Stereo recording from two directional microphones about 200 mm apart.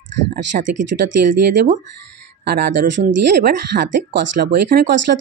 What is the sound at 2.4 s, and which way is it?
Speech, 50° right (ahead or behind).